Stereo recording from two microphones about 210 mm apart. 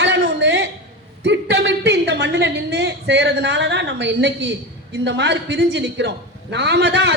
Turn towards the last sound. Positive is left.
turn(degrees=-55)  # may be behind; listen again after turning